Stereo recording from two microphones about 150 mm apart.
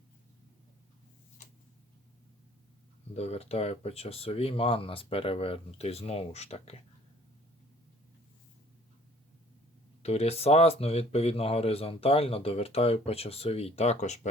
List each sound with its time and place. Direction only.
3.2 s speech: 45° left (ahead or behind)
10.0 s speech: 45° left (ahead or behind)